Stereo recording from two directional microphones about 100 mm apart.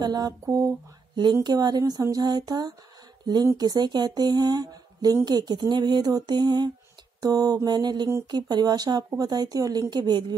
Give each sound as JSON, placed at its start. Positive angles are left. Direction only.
{"t": 0.0, "sound": "mantra", "side_deg": -45}
{"t": 1.3, "sound": "speech", "side_deg": -45}
{"t": 7.2, "sound": "mantra", "side_deg": -40}
{"t": 8.3, "sound": "speech", "side_deg": -45}